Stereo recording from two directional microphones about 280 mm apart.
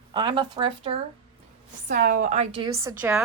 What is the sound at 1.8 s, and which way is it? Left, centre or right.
A woman's voice, right.